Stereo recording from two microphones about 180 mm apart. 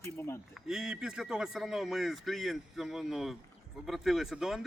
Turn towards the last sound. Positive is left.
turn(degrees=0)  # may be behind; listen again after turning